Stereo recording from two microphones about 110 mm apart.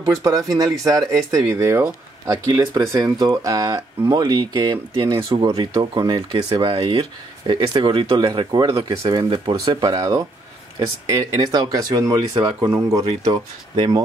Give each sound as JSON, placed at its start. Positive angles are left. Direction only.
{"t": 0.0, "sound": "speech", "side_deg": -30}
{"t": 5.4, "sound": "speech", "side_deg": -35}
{"t": 9.8, "sound": "speech", "side_deg": -35}